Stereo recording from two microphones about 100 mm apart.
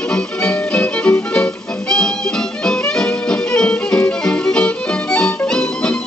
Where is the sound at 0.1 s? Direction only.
10° left (ahead or behind).